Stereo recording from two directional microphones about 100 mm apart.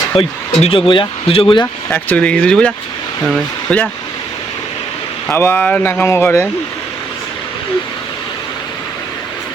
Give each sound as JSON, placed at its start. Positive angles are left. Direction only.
{"t": 0.2, "sound": "speech", "side_deg": 70}
{"t": 1.9, "sound": "speech", "side_deg": 15}
{"t": 5.3, "sound": "speech", "side_deg": 25}